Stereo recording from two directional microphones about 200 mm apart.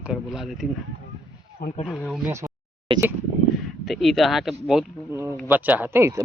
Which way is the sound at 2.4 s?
15° right (ahead or behind).